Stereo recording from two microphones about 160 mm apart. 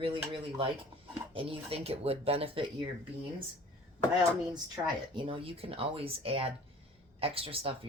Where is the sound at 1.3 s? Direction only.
35° right (ahead or behind).